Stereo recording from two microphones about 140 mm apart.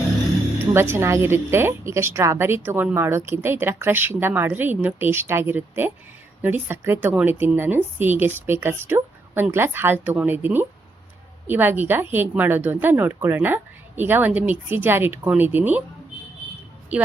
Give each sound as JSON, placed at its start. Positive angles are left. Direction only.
{"t": 0.7, "sound": "a woman's voice", "side_deg": -15}
{"t": 16.9, "sound": "speech", "side_deg": -10}